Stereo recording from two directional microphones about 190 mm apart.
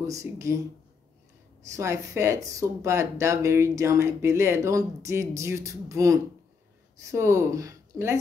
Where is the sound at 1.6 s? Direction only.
15° right (ahead or behind).